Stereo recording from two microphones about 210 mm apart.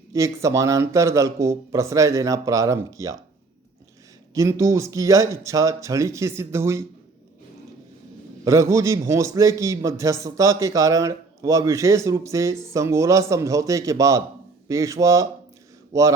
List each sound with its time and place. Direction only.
0.1 s a man's voice: 15° right (ahead or behind)
4.4 s a man's voice: 15° right (ahead or behind)
8.4 s a man's voice: 15° right (ahead or behind)